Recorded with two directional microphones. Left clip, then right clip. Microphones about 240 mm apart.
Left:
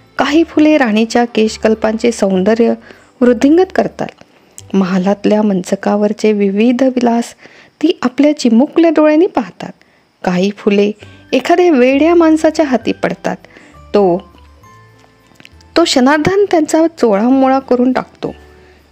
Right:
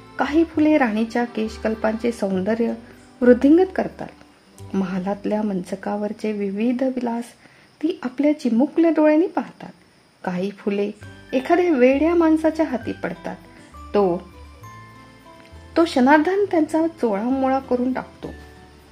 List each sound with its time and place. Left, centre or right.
0.1 s speech: left
15.7 s speech: left